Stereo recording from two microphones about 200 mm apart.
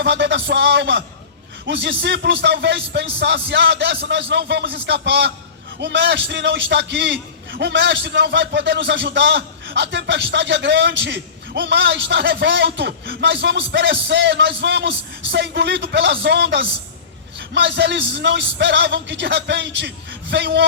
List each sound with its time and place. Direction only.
0.0 s a man's voice: 60° right (ahead or behind)